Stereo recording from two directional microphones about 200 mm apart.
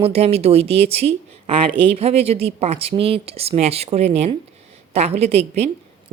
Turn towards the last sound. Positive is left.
turn(degrees=-30)  # may be behind; listen again after turning